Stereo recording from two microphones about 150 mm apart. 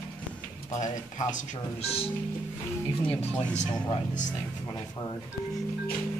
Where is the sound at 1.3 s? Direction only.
45° left (ahead or behind).